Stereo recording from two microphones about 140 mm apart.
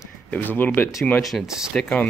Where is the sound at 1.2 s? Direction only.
Centre (ahead or behind).